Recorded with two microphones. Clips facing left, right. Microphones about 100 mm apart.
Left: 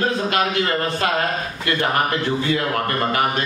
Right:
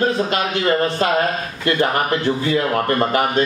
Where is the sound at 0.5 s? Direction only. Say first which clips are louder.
Right 4 dB; 30° right (ahead or behind).